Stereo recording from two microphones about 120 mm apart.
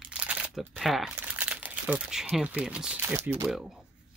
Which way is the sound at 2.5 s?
10° right (ahead or behind).